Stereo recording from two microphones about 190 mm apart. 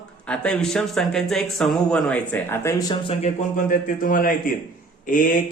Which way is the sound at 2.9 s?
25° left (ahead or behind).